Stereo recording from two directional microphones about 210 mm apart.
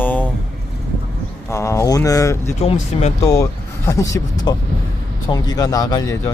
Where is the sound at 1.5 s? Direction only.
15° left (ahead or behind).